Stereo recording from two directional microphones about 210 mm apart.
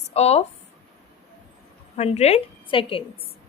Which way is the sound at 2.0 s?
30° left (ahead or behind).